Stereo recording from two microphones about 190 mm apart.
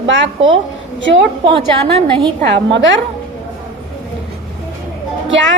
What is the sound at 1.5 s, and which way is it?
Speech, 25° right (ahead or behind).